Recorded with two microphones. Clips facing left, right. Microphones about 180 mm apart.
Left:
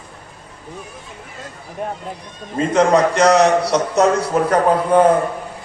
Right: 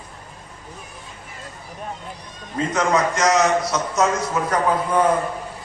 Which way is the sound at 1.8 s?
65° left (ahead or behind).